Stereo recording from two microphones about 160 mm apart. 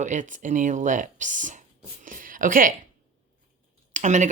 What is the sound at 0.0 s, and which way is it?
Speech, 50° right (ahead or behind).